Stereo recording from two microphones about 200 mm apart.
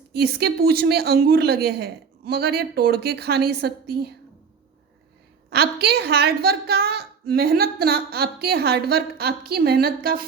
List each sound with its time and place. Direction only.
0.1 s a woman's voice: 55° right (ahead or behind)
5.5 s a woman's voice: 55° right (ahead or behind)